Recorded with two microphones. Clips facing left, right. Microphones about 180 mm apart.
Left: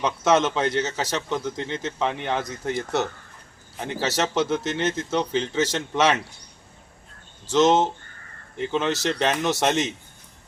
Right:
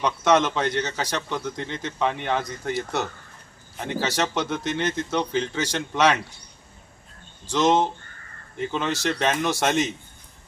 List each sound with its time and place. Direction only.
0.0 s speech: 5° left (ahead or behind)
7.4 s speech: centre (ahead or behind)